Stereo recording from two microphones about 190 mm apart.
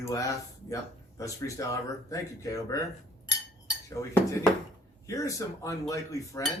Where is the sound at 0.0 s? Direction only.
15° left (ahead or behind).